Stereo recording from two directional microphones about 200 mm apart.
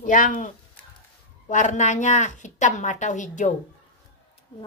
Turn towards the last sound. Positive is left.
turn(degrees=40)  # may be behind; listen again after turning